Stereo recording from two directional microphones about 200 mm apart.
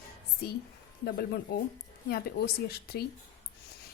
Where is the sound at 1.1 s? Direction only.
55° left (ahead or behind).